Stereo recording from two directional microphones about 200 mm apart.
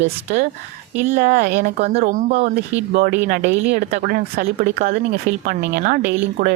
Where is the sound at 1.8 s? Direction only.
35° right (ahead or behind).